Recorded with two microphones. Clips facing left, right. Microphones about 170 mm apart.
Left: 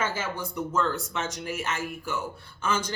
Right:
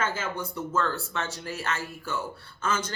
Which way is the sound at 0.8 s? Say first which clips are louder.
Left 1 dB; 15° left (ahead or behind).